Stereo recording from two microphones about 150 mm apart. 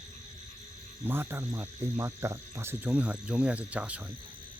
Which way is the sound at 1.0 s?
15° right (ahead or behind).